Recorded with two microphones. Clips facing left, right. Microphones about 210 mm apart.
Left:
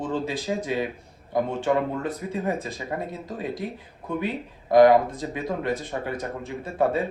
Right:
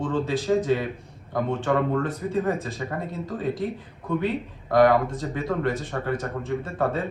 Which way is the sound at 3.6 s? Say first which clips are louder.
Right 3 dB; 15° left (ahead or behind).